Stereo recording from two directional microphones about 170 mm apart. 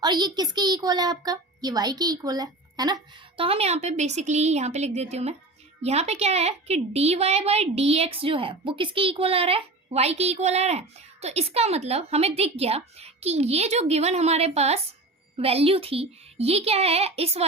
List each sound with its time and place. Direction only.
0.0 s a child's voice: 25° right (ahead or behind)